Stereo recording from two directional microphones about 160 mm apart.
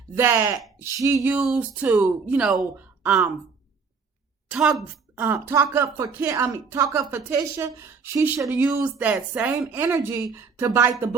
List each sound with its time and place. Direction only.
0.2 s speech: 15° right (ahead or behind)
2.7 s a sound: 10° right (ahead or behind)
4.4 s a woman's voice: 5° right (ahead or behind)